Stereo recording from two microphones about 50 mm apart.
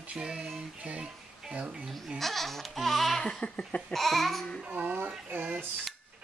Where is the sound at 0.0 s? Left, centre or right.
Right.